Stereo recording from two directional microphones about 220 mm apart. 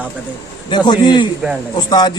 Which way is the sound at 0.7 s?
20° left (ahead or behind).